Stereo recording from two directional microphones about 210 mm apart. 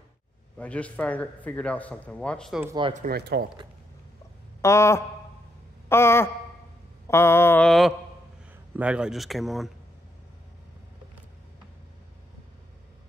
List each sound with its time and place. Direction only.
0.6 s a man's voice: 5° left (ahead or behind)
2.6 s speech: 20° right (ahead or behind)
2.9 s speech: 45° right (ahead or behind)
4.6 s a sound: 15° left (ahead or behind)
5.9 s a man's voice: 10° left (ahead or behind)